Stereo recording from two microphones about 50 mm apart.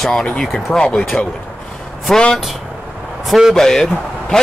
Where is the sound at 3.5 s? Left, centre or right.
Centre.